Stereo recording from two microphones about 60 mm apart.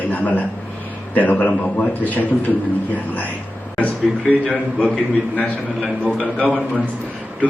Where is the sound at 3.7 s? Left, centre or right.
Left.